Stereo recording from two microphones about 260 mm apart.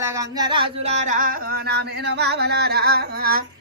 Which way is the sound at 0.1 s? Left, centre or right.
Centre.